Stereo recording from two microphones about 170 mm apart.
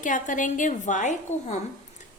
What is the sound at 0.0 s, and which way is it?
A woman's voice, 50° left (ahead or behind).